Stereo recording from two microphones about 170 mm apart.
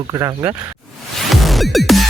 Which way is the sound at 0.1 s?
20° right (ahead or behind).